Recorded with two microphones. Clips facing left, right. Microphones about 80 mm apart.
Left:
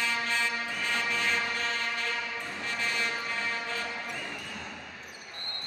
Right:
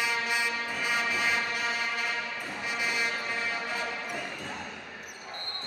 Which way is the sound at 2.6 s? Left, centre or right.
Centre.